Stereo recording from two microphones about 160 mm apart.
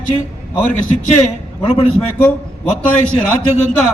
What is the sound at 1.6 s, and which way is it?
Speech, 35° left (ahead or behind).